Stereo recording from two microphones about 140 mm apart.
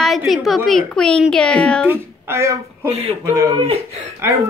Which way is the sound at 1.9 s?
15° right (ahead or behind).